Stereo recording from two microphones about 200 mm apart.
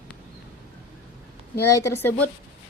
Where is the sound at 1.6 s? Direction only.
15° left (ahead or behind).